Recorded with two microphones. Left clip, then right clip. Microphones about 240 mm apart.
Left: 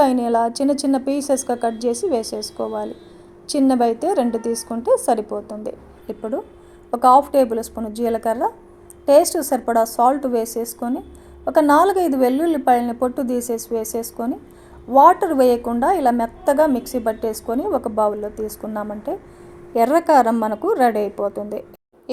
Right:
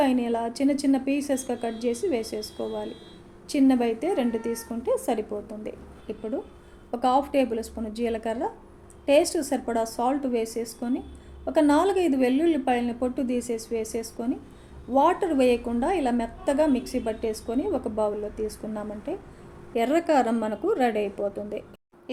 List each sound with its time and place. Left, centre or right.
0.0 s a woman's voice: left